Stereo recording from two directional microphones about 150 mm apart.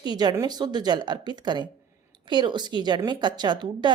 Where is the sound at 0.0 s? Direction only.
30° right (ahead or behind).